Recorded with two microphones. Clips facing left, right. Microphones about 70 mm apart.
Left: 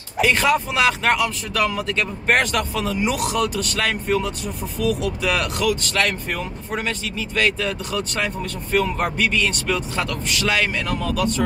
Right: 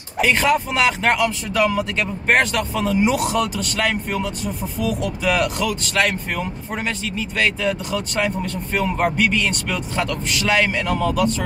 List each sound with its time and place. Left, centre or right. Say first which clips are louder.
0.2 s speech: right 1 dB; centre